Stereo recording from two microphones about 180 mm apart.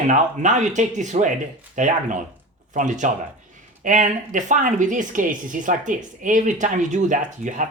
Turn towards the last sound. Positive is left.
turn(degrees=-45)  # may be behind; listen again after turning